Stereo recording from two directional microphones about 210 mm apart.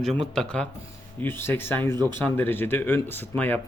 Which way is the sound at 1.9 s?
20° right (ahead or behind).